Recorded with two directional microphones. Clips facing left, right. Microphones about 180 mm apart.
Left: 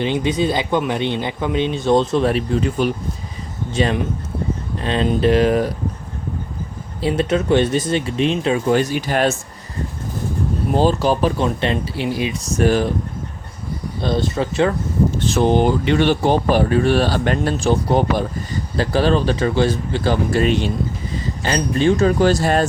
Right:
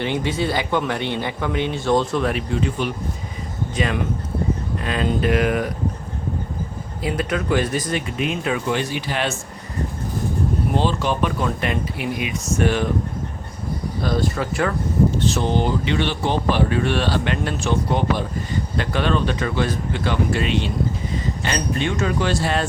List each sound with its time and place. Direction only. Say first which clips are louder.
0.0 s speech: left 4 dB; 20° left (ahead or behind); by 2.9 s 40° left (ahead or behind)
3.8 s speech: left 4 dB; 30° left (ahead or behind)
7.0 s speech: left 5 dB; 30° left (ahead or behind)
8.7 s speech: left 6 dB; 45° left (ahead or behind)
10.8 s speech: left 6 dB; 40° left (ahead or behind)
14.0 s speech: left 3 dB; 25° left (ahead or behind)
15.3 s speech: left 5 dB; 55° left (ahead or behind)